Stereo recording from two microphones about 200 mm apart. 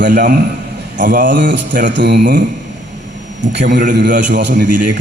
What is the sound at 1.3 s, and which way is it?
A man's voice, 60° right (ahead or behind).